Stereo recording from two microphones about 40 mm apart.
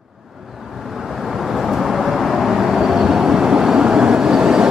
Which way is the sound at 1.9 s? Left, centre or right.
Centre.